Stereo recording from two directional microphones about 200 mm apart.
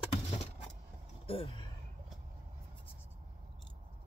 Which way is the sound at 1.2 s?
30° left (ahead or behind).